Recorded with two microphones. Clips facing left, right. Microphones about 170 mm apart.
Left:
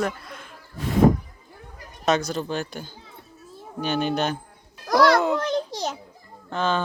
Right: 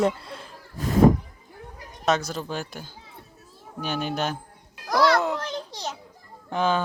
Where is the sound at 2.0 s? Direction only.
5° right (ahead or behind).